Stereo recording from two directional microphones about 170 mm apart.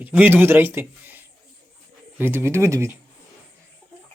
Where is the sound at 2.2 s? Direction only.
15° right (ahead or behind).